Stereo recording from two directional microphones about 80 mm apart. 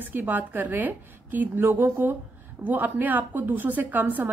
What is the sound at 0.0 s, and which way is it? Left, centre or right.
A woman's voice, right.